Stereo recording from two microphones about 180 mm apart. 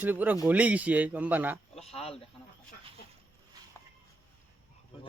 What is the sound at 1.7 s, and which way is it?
Speech, 35° left (ahead or behind).